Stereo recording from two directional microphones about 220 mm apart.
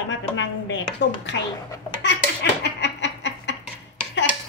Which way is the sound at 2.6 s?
50° left (ahead or behind).